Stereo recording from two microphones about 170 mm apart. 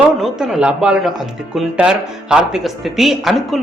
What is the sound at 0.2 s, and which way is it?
Speech, centre (ahead or behind).